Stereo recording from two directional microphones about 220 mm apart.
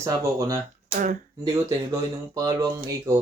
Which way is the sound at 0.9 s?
35° right (ahead or behind).